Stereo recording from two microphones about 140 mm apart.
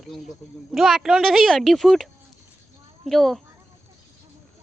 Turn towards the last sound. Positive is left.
turn(degrees=0)  # may be behind; listen again after turning